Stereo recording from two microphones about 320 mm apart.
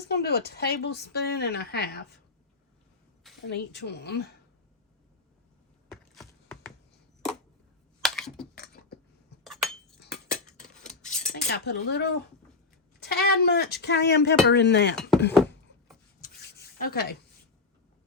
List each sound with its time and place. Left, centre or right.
0.0 s a woman's voice: left
3.4 s a woman's voice: left
5.9 s a sound: centre
8.0 s typing: centre
8.5 s cutlery: left
9.4 s a sound: centre
10.8 s cutlery: left
13.1 s a woman's voice: left
16.2 s rub: left